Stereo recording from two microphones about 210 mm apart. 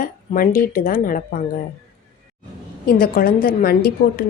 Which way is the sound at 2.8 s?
45° left (ahead or behind).